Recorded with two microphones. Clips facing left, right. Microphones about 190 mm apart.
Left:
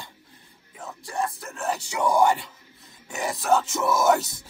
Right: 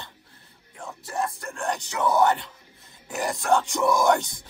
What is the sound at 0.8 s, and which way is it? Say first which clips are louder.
Speech: even; centre (ahead or behind).